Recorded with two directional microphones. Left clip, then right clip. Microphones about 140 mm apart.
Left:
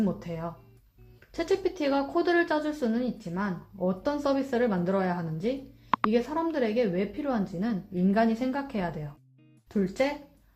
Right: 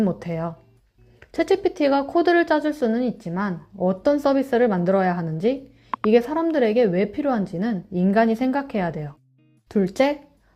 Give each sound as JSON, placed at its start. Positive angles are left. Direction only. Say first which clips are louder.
{"t": 0.0, "sound": "speech", "louder": "right 7 dB", "side_deg": -25}